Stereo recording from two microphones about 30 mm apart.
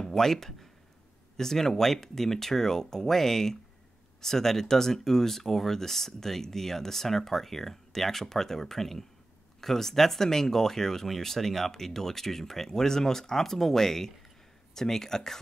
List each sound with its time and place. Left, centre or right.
0.0 s speech: centre